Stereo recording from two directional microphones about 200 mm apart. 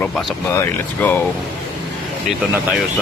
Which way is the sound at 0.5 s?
10° left (ahead or behind).